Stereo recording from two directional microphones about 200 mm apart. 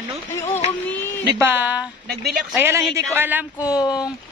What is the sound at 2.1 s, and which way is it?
Speech, 50° right (ahead or behind).